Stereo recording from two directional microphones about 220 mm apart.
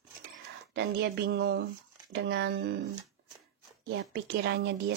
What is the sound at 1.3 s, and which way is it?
Speech, 55° right (ahead or behind).